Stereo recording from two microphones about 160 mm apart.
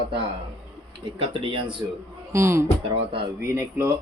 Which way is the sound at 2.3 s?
15° right (ahead or behind).